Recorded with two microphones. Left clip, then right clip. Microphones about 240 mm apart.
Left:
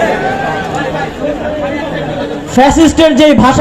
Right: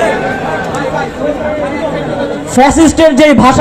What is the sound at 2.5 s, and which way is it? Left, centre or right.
Speech, right.